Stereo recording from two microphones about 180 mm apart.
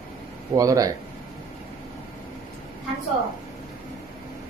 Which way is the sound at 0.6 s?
20° right (ahead or behind).